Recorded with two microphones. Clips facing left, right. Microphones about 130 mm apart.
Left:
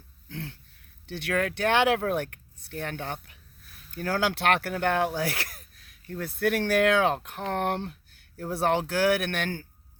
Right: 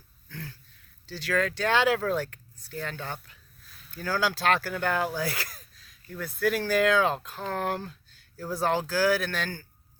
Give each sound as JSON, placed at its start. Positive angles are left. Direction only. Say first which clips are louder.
{"t": 1.3, "sound": "speech", "louder": "left 1 dB", "side_deg": 20}
{"t": 2.2, "sound": "speech", "louder": "even", "side_deg": 65}
{"t": 4.0, "sound": "speech", "louder": "left 1 dB", "side_deg": 25}
{"t": 6.5, "sound": "a man's voice", "louder": "left 3 dB", "side_deg": 70}
{"t": 6.8, "sound": "speech", "louder": "even", "side_deg": 25}
{"t": 7.3, "sound": "a man's voice", "louder": "left 2 dB", "side_deg": 70}
{"t": 7.7, "sound": "speech", "louder": "left 2 dB", "side_deg": 25}
{"t": 9.2, "sound": "a man's voice", "louder": "left 2 dB", "side_deg": 70}